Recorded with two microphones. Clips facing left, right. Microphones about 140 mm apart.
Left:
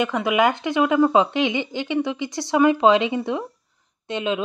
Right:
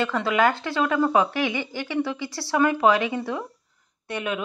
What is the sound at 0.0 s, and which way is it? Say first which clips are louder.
Speech: left 2 dB; 15° left (ahead or behind).